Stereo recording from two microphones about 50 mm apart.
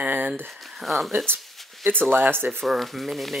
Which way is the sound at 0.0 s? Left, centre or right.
Right.